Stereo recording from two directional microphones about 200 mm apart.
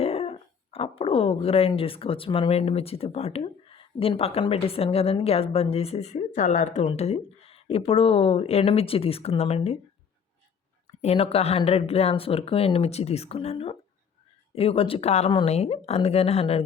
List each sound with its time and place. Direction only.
0.0 s speech: 30° left (ahead or behind)
11.0 s speech: 30° left (ahead or behind)